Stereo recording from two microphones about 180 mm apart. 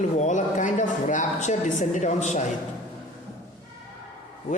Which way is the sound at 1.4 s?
40° left (ahead or behind).